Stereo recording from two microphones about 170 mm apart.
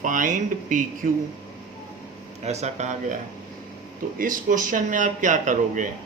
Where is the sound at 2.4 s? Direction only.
40° right (ahead or behind).